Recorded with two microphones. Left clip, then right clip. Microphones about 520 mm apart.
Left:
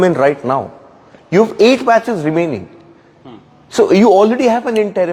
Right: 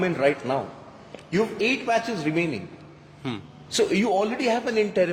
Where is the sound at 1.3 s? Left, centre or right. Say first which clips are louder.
Left 14 dB; left.